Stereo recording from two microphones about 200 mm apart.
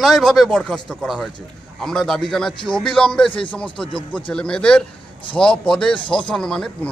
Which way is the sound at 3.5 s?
5° left (ahead or behind).